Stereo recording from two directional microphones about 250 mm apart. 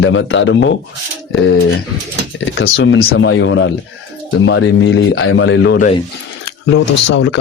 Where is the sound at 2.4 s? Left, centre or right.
Left.